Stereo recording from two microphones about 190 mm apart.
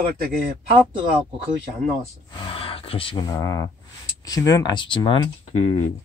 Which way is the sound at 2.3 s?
30° left (ahead or behind).